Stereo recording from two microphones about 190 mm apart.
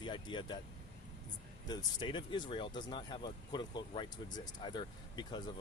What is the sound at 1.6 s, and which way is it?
Speech, 20° left (ahead or behind).